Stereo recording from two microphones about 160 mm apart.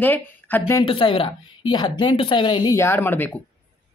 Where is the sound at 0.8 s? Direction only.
30° left (ahead or behind); by 3.3 s 15° left (ahead or behind).